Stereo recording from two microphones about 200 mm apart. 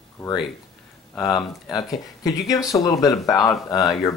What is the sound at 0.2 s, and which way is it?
Speech, 5° left (ahead or behind).